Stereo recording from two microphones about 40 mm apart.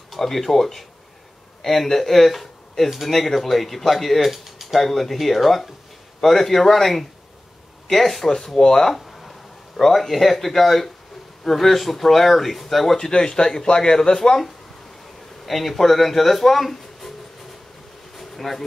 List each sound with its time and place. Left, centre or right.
0.1 s speech: centre
9.0 s a sound: centre
9.8 s speech: centre
13.1 s a man's voice: left
15.4 s speech: centre
18.1 s bee: centre